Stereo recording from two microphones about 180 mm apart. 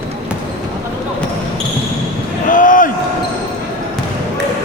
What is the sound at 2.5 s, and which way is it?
Basketball bounce, 50° left (ahead or behind).